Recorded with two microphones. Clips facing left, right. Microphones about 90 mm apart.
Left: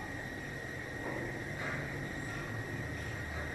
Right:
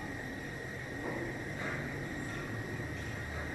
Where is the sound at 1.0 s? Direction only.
Centre (ahead or behind).